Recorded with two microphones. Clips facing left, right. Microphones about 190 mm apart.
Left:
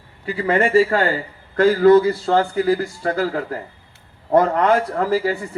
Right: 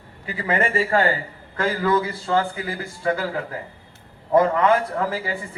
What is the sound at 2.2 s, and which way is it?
Speech, 45° left (ahead or behind).